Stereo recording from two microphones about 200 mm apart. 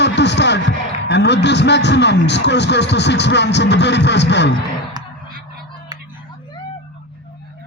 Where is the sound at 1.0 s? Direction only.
60° left (ahead or behind).